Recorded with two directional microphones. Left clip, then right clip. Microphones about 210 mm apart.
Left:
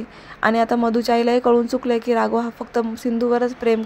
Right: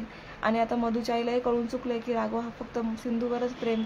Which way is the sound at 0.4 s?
35° left (ahead or behind).